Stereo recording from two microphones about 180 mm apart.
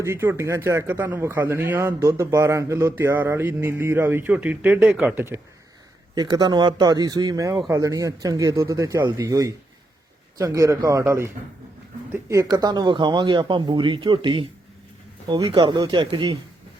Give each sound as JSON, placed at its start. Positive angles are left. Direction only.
{"t": 0.0, "sound": "speech", "side_deg": -15}
{"t": 6.1, "sound": "speech", "side_deg": -20}